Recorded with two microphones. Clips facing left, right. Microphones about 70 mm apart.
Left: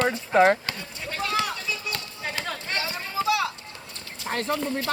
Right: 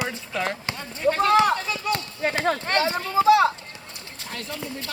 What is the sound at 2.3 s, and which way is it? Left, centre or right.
Speech, right.